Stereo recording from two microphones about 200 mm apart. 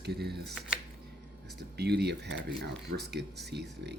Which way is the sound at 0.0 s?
55° right (ahead or behind).